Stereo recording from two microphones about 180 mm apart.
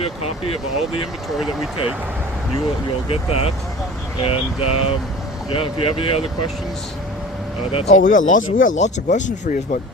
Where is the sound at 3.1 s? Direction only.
35° left (ahead or behind).